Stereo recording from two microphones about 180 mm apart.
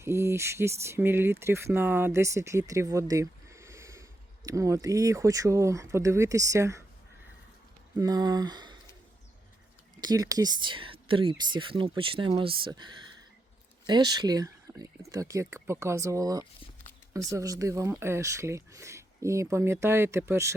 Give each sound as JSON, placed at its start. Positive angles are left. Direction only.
{"t": 0.0, "sound": "speech", "side_deg": -15}
{"t": 7.9, "sound": "speech", "side_deg": -20}
{"t": 10.0, "sound": "speech", "side_deg": -20}